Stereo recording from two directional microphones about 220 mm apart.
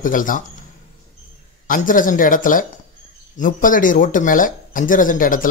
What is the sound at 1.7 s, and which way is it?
Speech, 40° left (ahead or behind).